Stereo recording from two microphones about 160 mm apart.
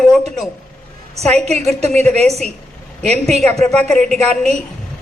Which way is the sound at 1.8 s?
40° right (ahead or behind).